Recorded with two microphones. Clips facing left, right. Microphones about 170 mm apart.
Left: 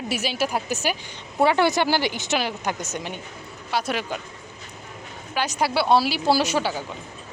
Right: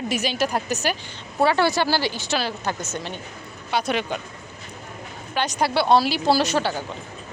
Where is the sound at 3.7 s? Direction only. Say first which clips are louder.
Right 2 dB; 5° left (ahead or behind).